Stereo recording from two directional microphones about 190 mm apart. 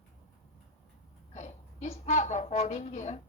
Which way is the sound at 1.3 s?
35° left (ahead or behind).